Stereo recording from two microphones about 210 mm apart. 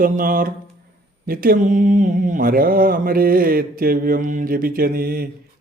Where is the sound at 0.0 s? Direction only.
40° right (ahead or behind).